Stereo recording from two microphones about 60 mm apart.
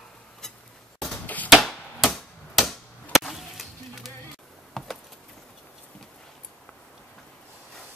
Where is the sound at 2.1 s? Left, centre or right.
Centre.